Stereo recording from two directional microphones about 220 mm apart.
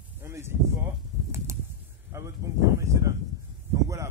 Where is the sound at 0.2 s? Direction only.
10° right (ahead or behind).